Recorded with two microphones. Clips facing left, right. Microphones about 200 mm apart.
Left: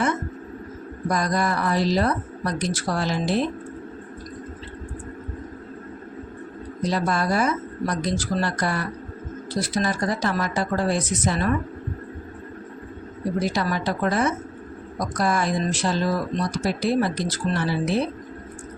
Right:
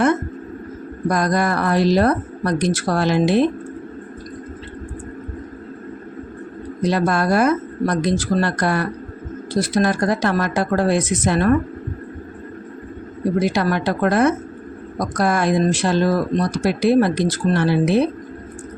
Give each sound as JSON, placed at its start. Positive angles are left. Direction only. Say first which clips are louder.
{"t": 1.1, "sound": "speech", "louder": "right 4 dB", "side_deg": -65}
{"t": 6.8, "sound": "speech", "louder": "right 5 dB", "side_deg": -65}
{"t": 13.4, "sound": "speech", "louder": "right 4 dB", "side_deg": -65}